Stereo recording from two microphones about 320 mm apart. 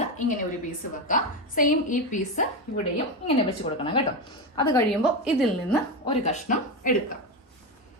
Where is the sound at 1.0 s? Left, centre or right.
Left.